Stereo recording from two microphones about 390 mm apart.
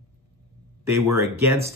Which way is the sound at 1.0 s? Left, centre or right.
Centre.